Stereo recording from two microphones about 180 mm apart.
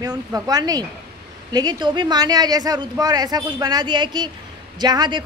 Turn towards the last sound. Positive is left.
turn(degrees=-25)  # may be behind; listen again after turning